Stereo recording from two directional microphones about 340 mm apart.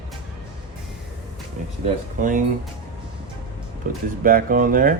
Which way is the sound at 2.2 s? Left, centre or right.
Right.